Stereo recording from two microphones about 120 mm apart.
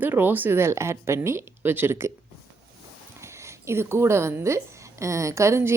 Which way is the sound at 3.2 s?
25° right (ahead or behind).